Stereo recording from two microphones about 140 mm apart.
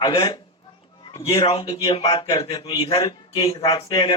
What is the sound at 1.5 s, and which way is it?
A man's voice, 40° left (ahead or behind).